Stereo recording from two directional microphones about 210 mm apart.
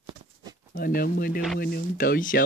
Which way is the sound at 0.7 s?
45° left (ahead or behind).